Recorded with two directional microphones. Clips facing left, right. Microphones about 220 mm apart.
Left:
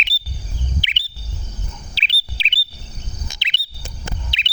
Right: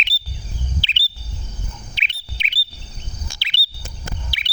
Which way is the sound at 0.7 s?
15° left (ahead or behind).